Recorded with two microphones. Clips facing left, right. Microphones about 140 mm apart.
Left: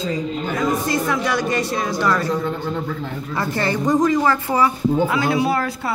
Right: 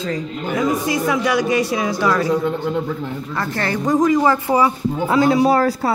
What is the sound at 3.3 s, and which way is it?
Speech, 5° left (ahead or behind).